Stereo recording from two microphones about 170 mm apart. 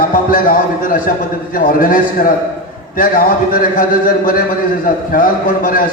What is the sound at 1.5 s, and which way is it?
A man's voice, 55° left (ahead or behind).